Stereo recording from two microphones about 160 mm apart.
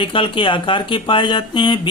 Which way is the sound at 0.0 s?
30° left (ahead or behind).